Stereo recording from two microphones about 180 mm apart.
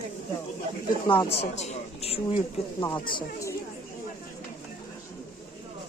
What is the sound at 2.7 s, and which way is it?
Speech, 20° left (ahead or behind).